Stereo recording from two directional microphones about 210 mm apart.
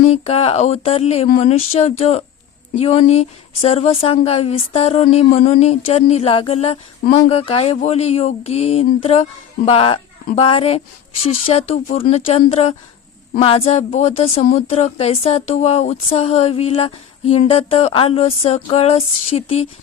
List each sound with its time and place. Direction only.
0.1 s speech: 30° left (ahead or behind)